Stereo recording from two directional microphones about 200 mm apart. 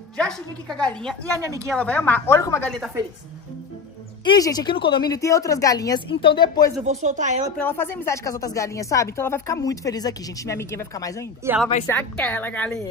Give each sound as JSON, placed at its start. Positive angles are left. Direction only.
{"t": 0.2, "sound": "a woman's voice", "side_deg": 5}
{"t": 1.3, "sound": "speech", "side_deg": -15}
{"t": 1.7, "sound": "speech", "side_deg": 5}
{"t": 2.7, "sound": "a woman's voice", "side_deg": -5}
{"t": 4.2, "sound": "a woman's voice", "side_deg": 20}
{"t": 6.9, "sound": "speech", "side_deg": -35}
{"t": 7.5, "sound": "speech", "side_deg": 10}
{"t": 11.4, "sound": "speech", "side_deg": -15}
{"t": 11.9, "sound": "speech", "side_deg": 10}